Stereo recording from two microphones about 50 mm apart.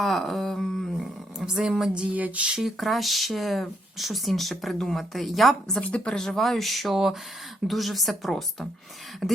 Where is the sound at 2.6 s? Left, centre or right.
Centre.